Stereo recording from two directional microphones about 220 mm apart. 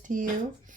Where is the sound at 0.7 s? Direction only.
35° right (ahead or behind).